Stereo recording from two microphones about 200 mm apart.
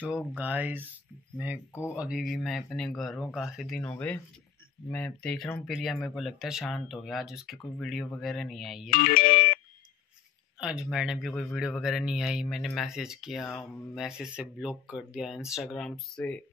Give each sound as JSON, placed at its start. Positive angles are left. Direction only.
{"t": 0.0, "sound": "a man's voice", "side_deg": -5}
{"t": 1.7, "sound": "speech", "side_deg": 10}
{"t": 2.0, "sound": "a man's voice", "side_deg": -5}
{"t": 8.9, "sound": "ringtone", "side_deg": 45}
{"t": 10.6, "sound": "a man's voice", "side_deg": -5}